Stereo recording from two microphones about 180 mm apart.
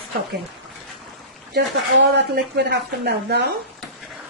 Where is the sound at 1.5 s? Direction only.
70° right (ahead or behind).